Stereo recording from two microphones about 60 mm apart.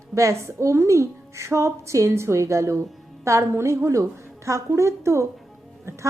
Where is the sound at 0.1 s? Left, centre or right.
Right.